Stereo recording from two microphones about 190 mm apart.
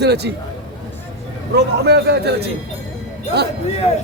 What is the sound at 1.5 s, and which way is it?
Speech, 60° right (ahead or behind).